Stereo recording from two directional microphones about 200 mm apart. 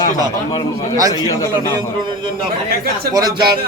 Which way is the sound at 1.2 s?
20° left (ahead or behind).